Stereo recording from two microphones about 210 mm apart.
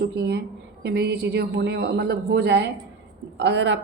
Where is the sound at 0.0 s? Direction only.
50° right (ahead or behind).